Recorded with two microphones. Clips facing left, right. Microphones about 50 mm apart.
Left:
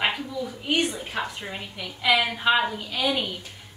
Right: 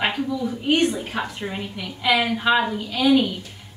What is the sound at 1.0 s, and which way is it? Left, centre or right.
A woman's voice, centre.